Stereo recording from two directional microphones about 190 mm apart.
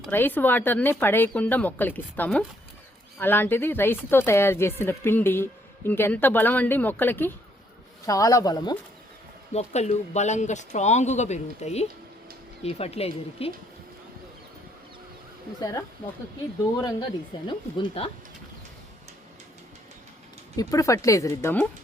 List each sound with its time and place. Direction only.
0.1 s speech: 10° left (ahead or behind)
9.5 s speech: 35° left (ahead or behind)
16.7 s speech: 20° left (ahead or behind)
20.6 s speech: 20° left (ahead or behind)